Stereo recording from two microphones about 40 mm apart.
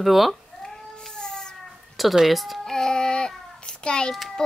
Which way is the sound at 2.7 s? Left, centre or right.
Centre.